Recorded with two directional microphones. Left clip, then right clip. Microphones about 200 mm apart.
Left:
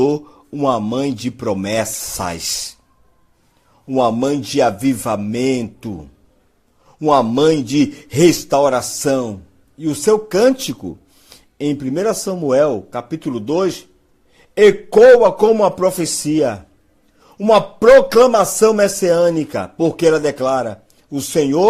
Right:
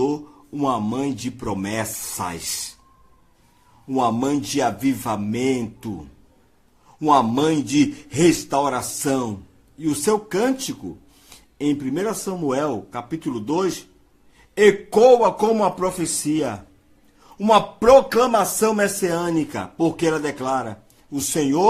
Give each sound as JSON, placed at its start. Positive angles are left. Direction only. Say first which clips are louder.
{"t": 0.0, "sound": "a man's voice", "louder": "left 7 dB", "side_deg": 30}
{"t": 3.8, "sound": "a man's voice", "louder": "left 5 dB", "side_deg": 25}